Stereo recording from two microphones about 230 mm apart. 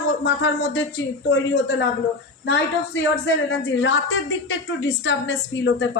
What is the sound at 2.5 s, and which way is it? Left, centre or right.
Speech, left.